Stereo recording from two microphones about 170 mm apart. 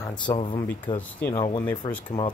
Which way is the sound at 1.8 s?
25° left (ahead or behind).